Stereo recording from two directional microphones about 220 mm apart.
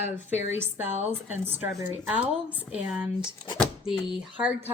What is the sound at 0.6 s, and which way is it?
A woman's voice, 10° right (ahead or behind).